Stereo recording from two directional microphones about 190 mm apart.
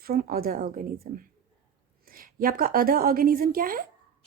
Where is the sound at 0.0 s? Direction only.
50° right (ahead or behind).